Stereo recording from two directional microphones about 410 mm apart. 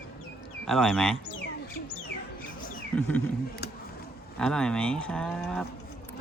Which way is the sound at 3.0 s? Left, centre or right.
Centre.